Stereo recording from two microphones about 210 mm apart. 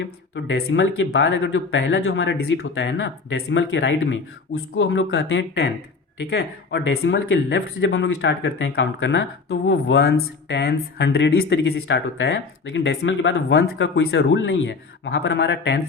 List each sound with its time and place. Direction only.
0.0 s speech: 55° left (ahead or behind)